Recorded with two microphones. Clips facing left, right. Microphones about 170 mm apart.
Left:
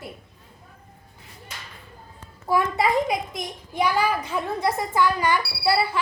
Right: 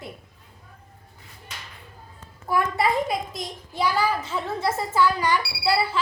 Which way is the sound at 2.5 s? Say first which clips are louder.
Left 1 dB; 20° left (ahead or behind).